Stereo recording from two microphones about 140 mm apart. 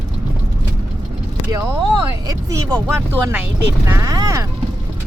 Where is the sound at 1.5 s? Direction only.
25° right (ahead or behind).